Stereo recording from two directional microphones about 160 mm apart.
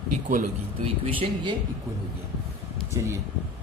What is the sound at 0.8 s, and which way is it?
Speech, 35° right (ahead or behind).